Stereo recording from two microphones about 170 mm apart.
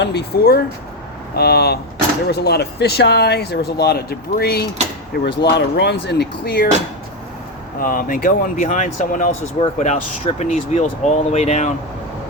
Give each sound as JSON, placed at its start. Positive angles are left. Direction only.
{"t": 0.0, "sound": "speech", "side_deg": 80}
{"t": 5.4, "sound": "speech", "side_deg": 85}
{"t": 7.8, "sound": "speech", "side_deg": 55}
{"t": 9.6, "sound": "speech", "side_deg": 35}